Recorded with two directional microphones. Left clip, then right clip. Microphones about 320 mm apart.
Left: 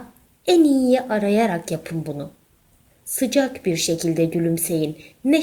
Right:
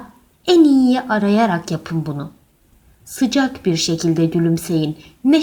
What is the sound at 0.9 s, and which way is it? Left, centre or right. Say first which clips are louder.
A woman's voice: right 2 dB; right.